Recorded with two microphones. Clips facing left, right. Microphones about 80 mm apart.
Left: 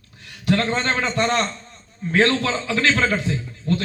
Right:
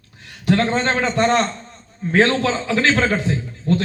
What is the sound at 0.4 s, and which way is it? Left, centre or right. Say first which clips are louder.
A man's voice: right 3 dB; right.